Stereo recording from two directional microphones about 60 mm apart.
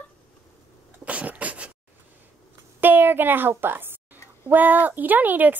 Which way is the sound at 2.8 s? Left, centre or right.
Right.